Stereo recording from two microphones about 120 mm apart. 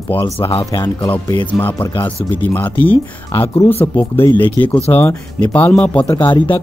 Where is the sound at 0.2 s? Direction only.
45° left (ahead or behind).